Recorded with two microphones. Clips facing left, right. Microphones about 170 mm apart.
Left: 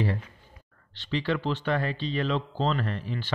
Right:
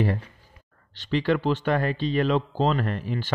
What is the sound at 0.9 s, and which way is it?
A man's voice, 45° right (ahead or behind).